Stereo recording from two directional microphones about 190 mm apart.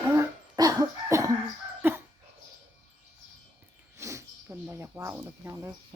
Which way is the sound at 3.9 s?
15° right (ahead or behind).